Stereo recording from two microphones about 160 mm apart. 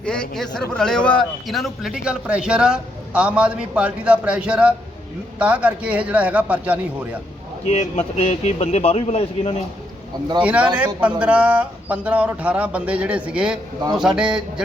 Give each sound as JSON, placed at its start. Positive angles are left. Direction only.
{"t": 0.0, "sound": "a man's voice", "side_deg": 5}
{"t": 7.8, "sound": "a man's voice", "side_deg": 45}
{"t": 10.4, "sound": "a man's voice", "side_deg": -10}